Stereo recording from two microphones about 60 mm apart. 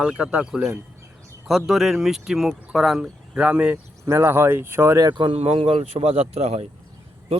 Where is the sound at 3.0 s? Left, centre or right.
Centre.